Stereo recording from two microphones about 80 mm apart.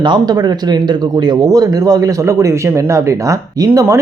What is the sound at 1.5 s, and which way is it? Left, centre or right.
Speech, right.